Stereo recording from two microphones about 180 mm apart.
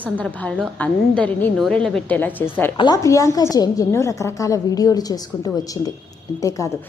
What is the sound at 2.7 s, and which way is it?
A woman's voice, 25° left (ahead or behind).